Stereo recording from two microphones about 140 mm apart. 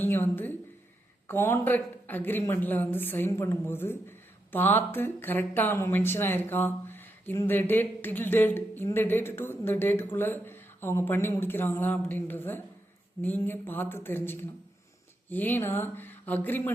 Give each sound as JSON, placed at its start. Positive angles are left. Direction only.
{"t": 0.0, "sound": "a woman's voice", "side_deg": 15}